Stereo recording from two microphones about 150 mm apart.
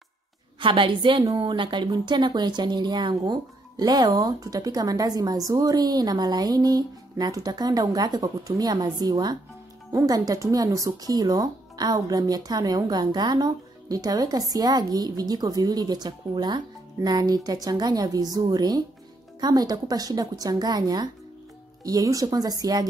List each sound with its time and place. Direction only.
0.6 s speech: 35° right (ahead or behind)